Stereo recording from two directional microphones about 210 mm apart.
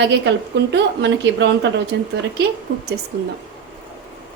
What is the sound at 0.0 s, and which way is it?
Speech, 55° right (ahead or behind).